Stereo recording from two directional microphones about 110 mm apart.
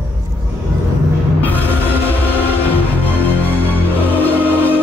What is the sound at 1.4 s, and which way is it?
Music, 15° left (ahead or behind).